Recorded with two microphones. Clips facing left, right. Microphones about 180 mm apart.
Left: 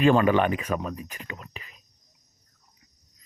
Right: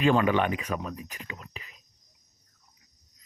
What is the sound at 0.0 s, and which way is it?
Speech, 45° left (ahead or behind).